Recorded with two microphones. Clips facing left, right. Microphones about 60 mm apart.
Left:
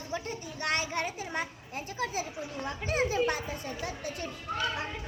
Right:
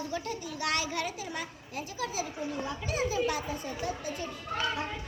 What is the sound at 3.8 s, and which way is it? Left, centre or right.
Speech, left.